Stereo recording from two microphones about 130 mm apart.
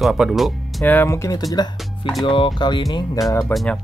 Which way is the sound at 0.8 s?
15° left (ahead or behind).